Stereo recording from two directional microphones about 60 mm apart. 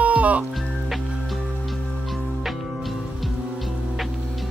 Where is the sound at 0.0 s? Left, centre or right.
Right.